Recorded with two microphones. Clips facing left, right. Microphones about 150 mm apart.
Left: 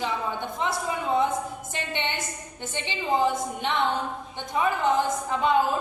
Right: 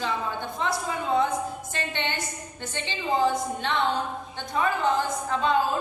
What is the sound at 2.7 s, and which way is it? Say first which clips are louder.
A woman's voice: left 1 dB; 20° left (ahead or behind).